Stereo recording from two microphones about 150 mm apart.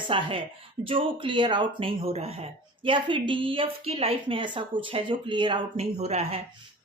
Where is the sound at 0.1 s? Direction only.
35° right (ahead or behind).